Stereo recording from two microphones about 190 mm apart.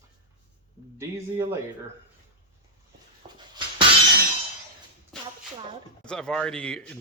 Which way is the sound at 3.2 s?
35° right (ahead or behind).